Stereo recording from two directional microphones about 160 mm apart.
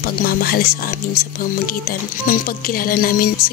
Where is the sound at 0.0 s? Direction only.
65° left (ahead or behind).